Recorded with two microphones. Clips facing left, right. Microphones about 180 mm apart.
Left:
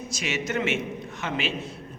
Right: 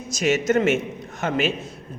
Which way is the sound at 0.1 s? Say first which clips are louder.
Right 10 dB; 45° right (ahead or behind).